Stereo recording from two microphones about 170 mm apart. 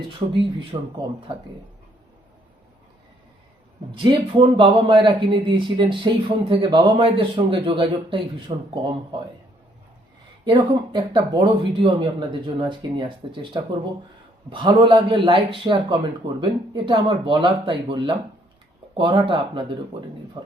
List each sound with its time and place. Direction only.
0.1 s speech: 30° right (ahead or behind)
3.9 s a man's voice: 30° right (ahead or behind)
10.4 s a man's voice: 30° right (ahead or behind)